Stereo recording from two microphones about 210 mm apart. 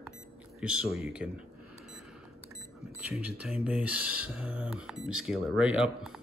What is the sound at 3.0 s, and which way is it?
A man's voice, 5° right (ahead or behind).